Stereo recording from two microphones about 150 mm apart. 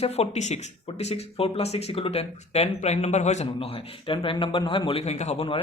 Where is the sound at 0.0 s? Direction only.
45° left (ahead or behind).